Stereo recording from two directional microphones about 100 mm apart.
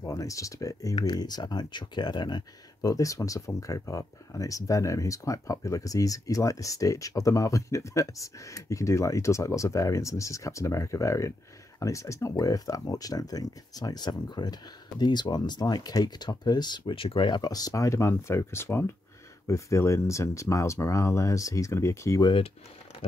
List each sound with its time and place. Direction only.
0.0 s speech: 30° left (ahead or behind)
0.9 s speech: 45° left (ahead or behind)
2.8 s speech: 35° left (ahead or behind)